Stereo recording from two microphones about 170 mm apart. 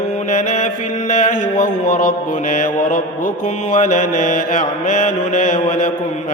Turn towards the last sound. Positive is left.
turn(degrees=50)  # may be behind; listen again after turning